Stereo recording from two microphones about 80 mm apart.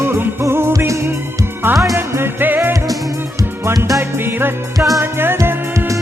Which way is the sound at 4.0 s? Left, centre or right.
Right.